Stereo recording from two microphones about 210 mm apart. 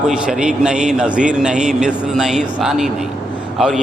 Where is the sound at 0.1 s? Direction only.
5° right (ahead or behind).